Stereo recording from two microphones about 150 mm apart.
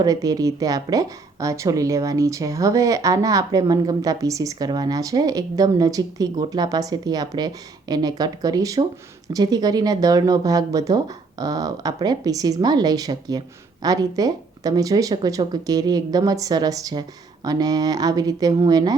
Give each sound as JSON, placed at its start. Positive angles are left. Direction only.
{"t": 0.0, "sound": "a woman's voice", "side_deg": -25}